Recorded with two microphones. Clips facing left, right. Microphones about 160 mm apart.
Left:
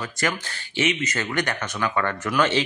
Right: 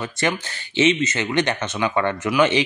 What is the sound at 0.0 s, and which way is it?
Speech, 25° right (ahead or behind).